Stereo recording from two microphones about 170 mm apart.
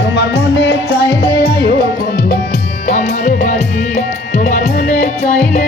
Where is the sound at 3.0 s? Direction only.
45° left (ahead or behind).